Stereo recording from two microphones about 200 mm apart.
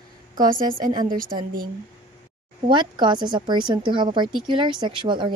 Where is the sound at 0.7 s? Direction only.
20° right (ahead or behind).